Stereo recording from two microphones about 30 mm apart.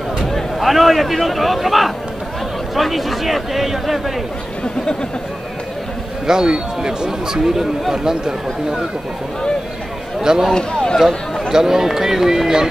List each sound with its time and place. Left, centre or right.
0.6 s a man's voice: centre
6.2 s speech: right
10.2 s speech: centre
10.5 s speech: left
11.5 s speech: centre